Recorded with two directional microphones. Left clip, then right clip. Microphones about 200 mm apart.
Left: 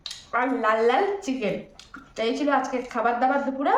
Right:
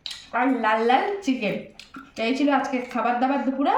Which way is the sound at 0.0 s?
20° left (ahead or behind).